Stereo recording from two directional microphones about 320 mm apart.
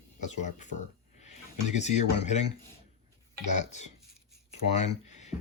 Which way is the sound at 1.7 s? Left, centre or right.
Left.